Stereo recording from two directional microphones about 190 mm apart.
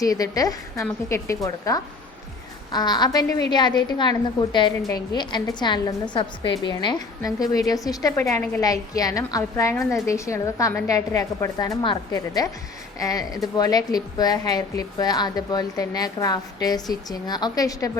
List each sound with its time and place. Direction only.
0.0 s a woman's voice: 20° left (ahead or behind)